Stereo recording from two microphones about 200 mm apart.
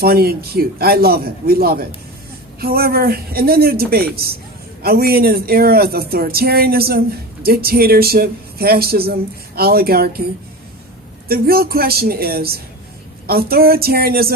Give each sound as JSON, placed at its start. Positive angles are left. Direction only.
{"t": 0.0, "sound": "speech", "side_deg": -50}
{"t": 11.3, "sound": "speech", "side_deg": -50}